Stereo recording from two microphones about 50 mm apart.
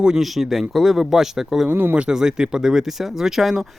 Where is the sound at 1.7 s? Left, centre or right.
Right.